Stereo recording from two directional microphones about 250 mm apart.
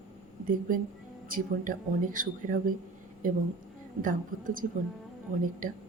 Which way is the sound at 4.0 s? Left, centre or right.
Right.